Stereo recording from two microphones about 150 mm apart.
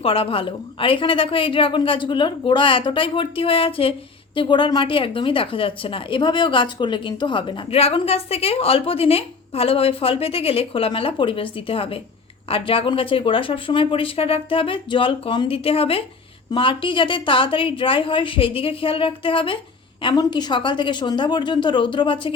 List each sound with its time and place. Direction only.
0.0 s speech: 35° left (ahead or behind)